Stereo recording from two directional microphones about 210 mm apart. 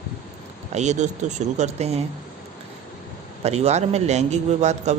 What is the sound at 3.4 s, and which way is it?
Speech, 30° right (ahead or behind).